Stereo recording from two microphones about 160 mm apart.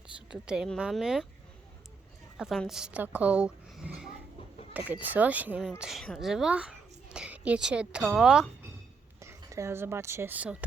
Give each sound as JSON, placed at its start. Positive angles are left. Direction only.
{"t": 0.3, "sound": "a woman's voice", "side_deg": -5}
{"t": 2.4, "sound": "a woman's voice", "side_deg": 0}
{"t": 9.2, "sound": "speech", "side_deg": -20}